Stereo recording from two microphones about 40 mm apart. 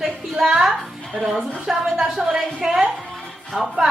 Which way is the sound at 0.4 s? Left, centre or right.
Centre.